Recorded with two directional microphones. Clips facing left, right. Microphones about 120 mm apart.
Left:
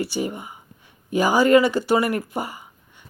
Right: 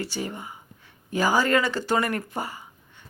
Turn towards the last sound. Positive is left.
turn(degrees=15)  # may be behind; listen again after turning